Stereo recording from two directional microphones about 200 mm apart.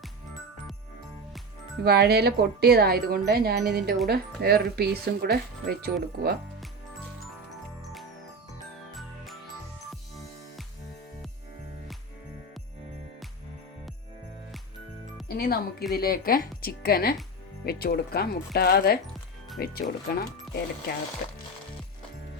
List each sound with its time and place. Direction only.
1.8 s speech: 55° right (ahead or behind)
8.9 s music: centre (ahead or behind)
15.3 s music: 50° left (ahead or behind)
15.9 s speech: 45° left (ahead or behind)